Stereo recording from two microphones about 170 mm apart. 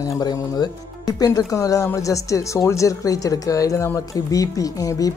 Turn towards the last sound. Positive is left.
turn(degrees=20)  # may be behind; listen again after turning